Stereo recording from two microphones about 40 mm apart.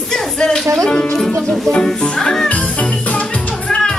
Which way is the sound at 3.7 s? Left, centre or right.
Centre.